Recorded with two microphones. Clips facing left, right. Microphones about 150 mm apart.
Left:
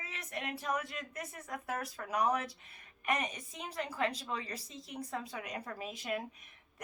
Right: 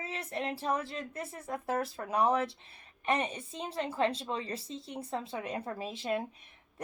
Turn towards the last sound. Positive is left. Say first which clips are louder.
# right 5 dB
turn(degrees=-30)  # may be behind; listen again after turning